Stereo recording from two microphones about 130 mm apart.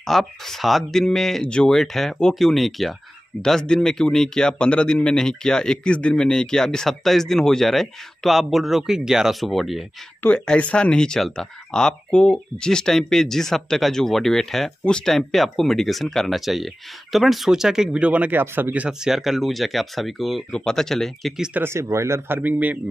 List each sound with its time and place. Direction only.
0.0 s speech: centre (ahead or behind)
21.5 s speech: 20° right (ahead or behind)